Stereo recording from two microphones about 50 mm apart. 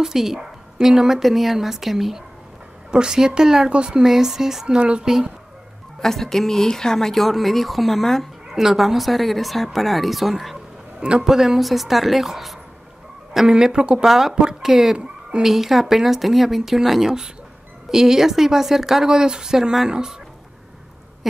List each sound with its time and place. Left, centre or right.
0.0 s speech: centre
4.7 s a woman's voice: centre
5.9 s speech: centre
8.5 s speech: centre
11.0 s speech: right
11.2 s speech: centre
14.0 s speech: centre